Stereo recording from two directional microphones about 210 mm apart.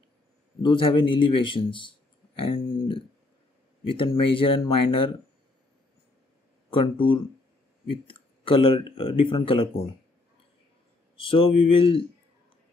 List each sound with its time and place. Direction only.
0.6 s speech: 20° left (ahead or behind)
6.7 s speech: 25° left (ahead or behind)
11.2 s speech: 25° left (ahead or behind)